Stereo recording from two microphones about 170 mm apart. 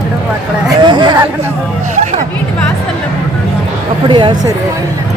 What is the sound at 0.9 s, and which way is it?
Speech, 25° right (ahead or behind).